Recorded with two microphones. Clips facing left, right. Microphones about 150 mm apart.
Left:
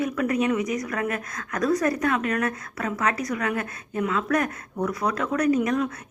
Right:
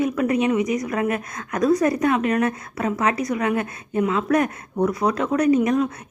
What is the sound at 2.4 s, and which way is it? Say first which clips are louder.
A woman's voice: right 5 dB; 25° right (ahead or behind).